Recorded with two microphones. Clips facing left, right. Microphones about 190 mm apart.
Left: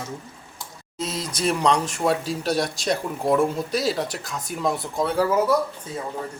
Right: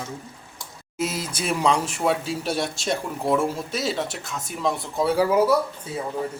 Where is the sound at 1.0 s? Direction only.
5° right (ahead or behind).